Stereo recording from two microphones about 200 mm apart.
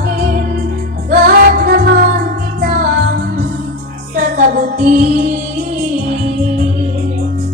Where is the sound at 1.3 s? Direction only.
45° right (ahead or behind).